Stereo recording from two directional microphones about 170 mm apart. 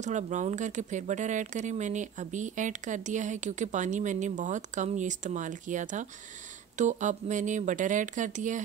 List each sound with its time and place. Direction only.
0.0 s speech: 45° right (ahead or behind)